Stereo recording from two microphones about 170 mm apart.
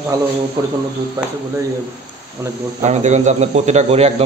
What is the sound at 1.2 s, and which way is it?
Speech, 20° right (ahead or behind).